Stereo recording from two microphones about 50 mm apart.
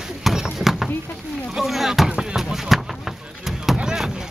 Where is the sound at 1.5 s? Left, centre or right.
Centre.